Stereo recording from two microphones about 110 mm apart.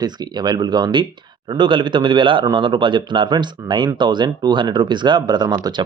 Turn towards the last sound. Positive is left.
turn(degrees=-40)  # may be behind; listen again after turning